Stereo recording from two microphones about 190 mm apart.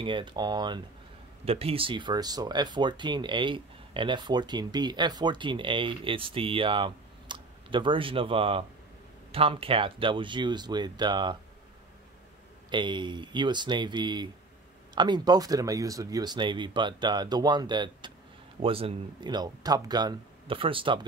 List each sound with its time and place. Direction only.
0.0 s speech: 25° right (ahead or behind)
12.6 s speech: 25° right (ahead or behind)